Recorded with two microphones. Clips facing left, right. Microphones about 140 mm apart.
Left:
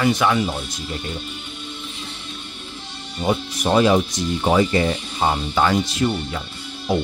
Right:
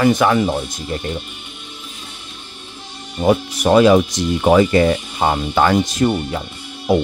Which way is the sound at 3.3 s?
75° right (ahead or behind).